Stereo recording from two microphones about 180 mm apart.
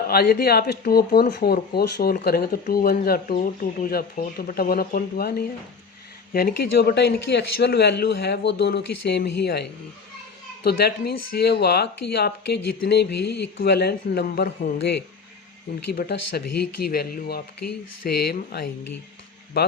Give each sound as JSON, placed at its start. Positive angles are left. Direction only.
{"t": 0.1, "sound": "speech", "side_deg": 60}
{"t": 16.0, "sound": "speech", "side_deg": 65}